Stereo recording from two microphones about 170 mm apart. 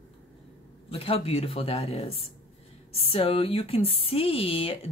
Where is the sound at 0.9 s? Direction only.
35° left (ahead or behind).